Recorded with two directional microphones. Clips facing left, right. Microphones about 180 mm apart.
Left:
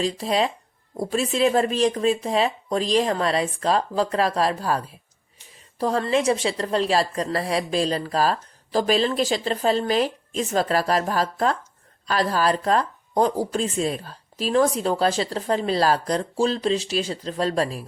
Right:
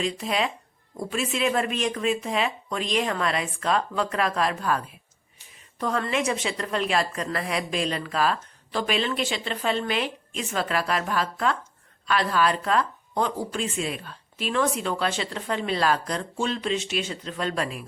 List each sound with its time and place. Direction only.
0.0 s speech: 35° left (ahead or behind)